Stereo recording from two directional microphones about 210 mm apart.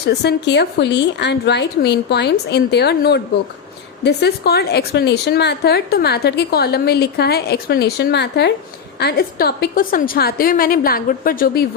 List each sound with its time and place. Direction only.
0.0 s a woman's voice: 50° left (ahead or behind)